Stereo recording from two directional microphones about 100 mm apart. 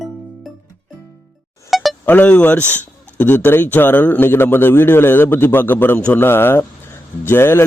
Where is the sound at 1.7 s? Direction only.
Centre (ahead or behind).